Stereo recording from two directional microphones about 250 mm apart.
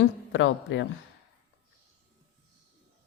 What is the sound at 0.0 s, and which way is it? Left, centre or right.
Speech, left.